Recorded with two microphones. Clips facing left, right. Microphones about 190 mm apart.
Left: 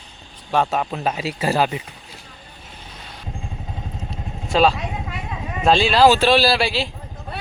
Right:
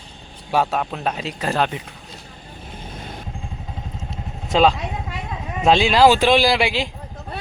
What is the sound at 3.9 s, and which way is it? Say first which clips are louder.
Vehicle: left 1 dB; 20° right (ahead or behind).